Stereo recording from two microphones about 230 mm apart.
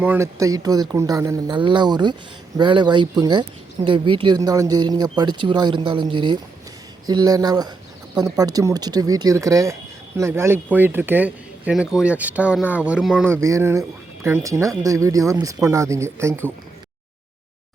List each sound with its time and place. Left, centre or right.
0.0 s speech: centre